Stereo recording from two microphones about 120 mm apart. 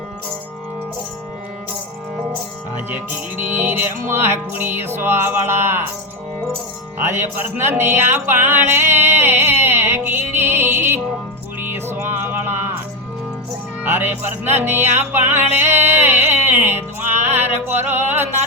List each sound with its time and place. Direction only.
2.9 s music: 15° right (ahead or behind)
7.0 s speech: 20° right (ahead or behind)
9.0 s music: 20° right (ahead or behind)
13.8 s music: 20° right (ahead or behind)